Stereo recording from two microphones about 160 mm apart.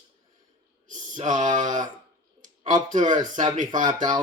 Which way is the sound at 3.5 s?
55° right (ahead or behind).